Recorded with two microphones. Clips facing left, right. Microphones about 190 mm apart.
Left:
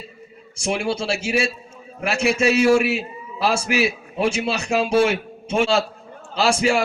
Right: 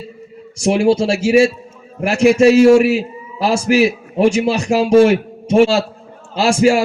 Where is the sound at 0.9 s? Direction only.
40° right (ahead or behind).